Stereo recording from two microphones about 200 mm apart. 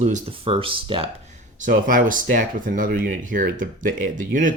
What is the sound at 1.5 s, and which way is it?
Speech, 40° right (ahead or behind).